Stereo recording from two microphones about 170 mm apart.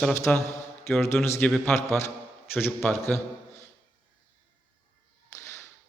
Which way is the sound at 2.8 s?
10° left (ahead or behind).